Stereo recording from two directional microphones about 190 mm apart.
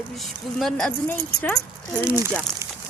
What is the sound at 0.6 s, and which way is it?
A woman's voice, centre (ahead or behind).